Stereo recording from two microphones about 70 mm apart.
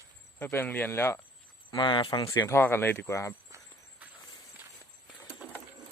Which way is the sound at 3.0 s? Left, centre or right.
Left.